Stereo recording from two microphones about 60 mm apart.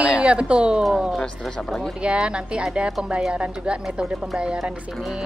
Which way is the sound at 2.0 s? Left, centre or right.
Centre.